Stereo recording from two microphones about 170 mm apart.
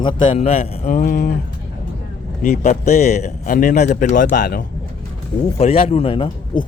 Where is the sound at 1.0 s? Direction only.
55° left (ahead or behind).